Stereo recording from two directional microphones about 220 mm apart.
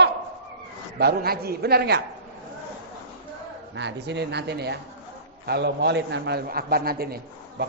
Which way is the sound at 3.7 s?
50° right (ahead or behind).